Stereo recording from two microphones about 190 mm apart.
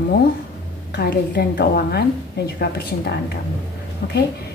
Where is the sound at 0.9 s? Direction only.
60° left (ahead or behind).